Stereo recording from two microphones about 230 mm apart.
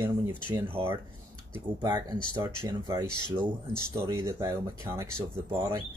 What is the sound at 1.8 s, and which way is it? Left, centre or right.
Speech, centre.